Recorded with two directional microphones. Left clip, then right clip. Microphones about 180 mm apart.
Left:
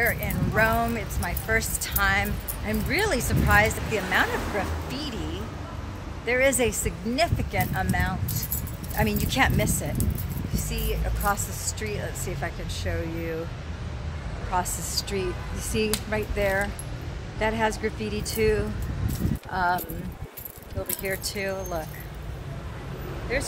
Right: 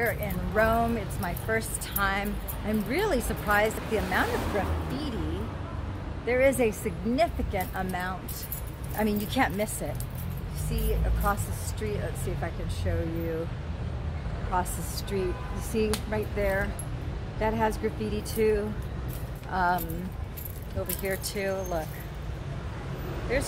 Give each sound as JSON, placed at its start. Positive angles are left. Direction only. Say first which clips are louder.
{"t": 0.0, "sound": "speech", "louder": "left 4 dB", "side_deg": -5}
{"t": 6.2, "sound": "speech", "louder": "left 1 dB", "side_deg": -5}
{"t": 11.8, "sound": "speech", "louder": "right 1 dB", "side_deg": 5}
{"t": 14.5, "sound": "speech", "louder": "left 3 dB", "side_deg": 10}
{"t": 19.5, "sound": "speech", "louder": "left 1 dB", "side_deg": -5}
{"t": 21.0, "sound": "speech", "louder": "left 2 dB", "side_deg": -10}
{"t": 23.3, "sound": "speech", "louder": "left 1 dB", "side_deg": -15}